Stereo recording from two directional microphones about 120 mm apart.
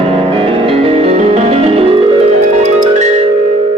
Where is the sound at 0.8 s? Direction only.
60° right (ahead or behind).